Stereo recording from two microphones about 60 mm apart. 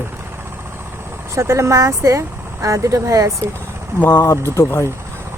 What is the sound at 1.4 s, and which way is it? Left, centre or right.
Speech, right.